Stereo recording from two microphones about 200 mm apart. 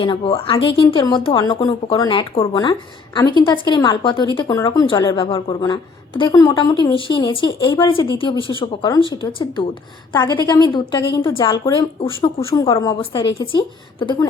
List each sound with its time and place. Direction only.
0.0 s speech: 25° left (ahead or behind)
12.5 s a woman's voice: 15° left (ahead or behind)